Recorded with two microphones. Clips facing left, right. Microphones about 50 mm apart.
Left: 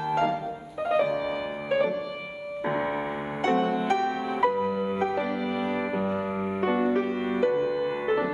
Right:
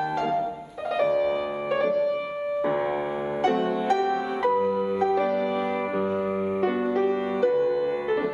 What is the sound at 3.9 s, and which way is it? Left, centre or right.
Music, centre.